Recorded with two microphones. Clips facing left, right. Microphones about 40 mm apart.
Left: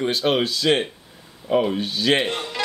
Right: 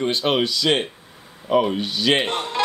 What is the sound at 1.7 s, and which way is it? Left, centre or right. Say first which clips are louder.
Speech: right 1 dB; right.